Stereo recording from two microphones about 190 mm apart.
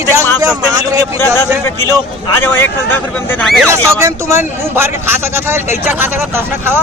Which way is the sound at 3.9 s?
15° right (ahead or behind).